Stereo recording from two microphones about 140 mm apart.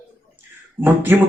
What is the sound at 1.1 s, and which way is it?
Speech, 15° right (ahead or behind).